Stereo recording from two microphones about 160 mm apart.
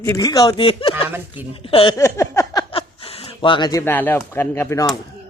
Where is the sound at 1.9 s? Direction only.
20° left (ahead or behind).